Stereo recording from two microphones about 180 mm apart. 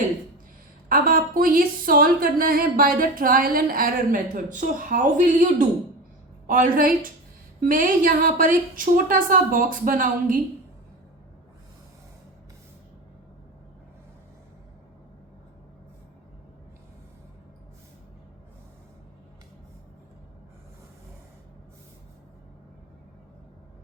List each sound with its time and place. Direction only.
0.9 s a woman's voice: 50° right (ahead or behind)